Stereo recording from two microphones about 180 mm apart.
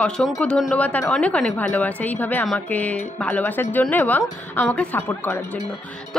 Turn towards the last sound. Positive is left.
turn(degrees=10)  # may be behind; listen again after turning